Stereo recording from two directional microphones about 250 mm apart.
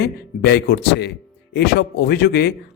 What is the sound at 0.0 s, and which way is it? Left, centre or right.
A man's voice, left.